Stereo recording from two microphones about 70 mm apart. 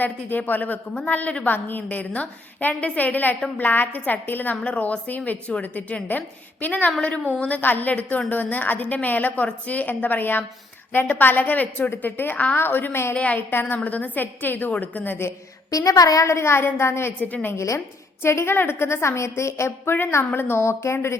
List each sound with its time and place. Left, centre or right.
0.0 s a woman's voice: left
13.1 s a woman's voice: centre
13.5 s a woman's voice: left
15.7 s a woman's voice: left
17.2 s a woman's voice: left
17.7 s a woman's voice: left